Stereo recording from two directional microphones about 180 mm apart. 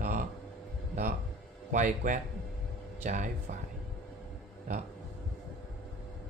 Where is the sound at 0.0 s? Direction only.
50° right (ahead or behind).